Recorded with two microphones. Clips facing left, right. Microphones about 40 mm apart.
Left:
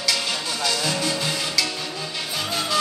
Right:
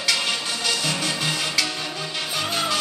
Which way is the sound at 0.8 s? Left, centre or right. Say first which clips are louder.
Left 1 dB; right.